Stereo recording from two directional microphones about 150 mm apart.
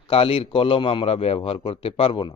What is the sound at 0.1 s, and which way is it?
Speech, 40° left (ahead or behind).